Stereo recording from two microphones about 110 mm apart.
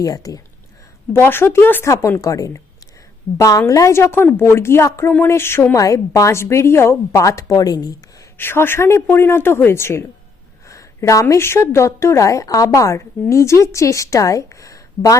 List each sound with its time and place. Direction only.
0.0 s speech: 30° left (ahead or behind)
1.1 s a woman's voice: 20° left (ahead or behind); by 7.9 s 35° left (ahead or behind)
8.4 s a woman's voice: 20° left (ahead or behind)